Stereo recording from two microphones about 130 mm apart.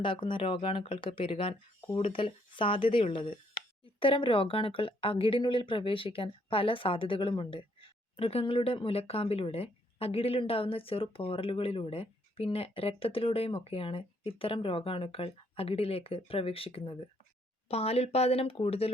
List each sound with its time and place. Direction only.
0.0 s speech: 40° left (ahead or behind)